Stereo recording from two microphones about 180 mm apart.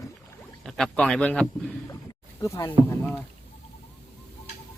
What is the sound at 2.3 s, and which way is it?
Speech, 15° left (ahead or behind).